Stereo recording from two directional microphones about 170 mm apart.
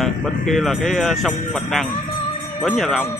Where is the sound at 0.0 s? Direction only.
Centre (ahead or behind).